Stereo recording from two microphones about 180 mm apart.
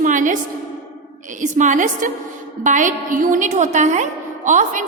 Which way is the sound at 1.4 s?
45° right (ahead or behind).